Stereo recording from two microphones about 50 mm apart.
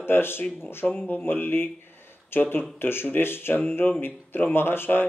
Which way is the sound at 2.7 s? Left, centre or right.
Left.